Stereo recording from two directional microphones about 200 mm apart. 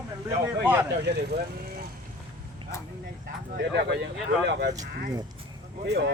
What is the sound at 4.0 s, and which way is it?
Speech, 60° right (ahead or behind).